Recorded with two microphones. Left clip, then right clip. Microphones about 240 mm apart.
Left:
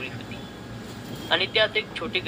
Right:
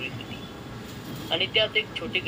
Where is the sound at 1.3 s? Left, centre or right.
Centre.